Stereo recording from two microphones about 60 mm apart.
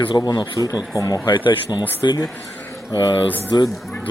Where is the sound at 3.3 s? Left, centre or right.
Left.